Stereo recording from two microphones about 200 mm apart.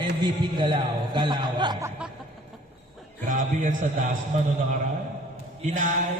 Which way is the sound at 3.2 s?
40° right (ahead or behind).